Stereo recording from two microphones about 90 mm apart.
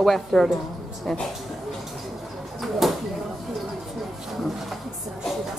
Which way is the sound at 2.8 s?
Centre (ahead or behind).